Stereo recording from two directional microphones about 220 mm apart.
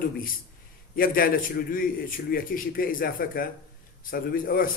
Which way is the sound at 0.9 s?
40° left (ahead or behind).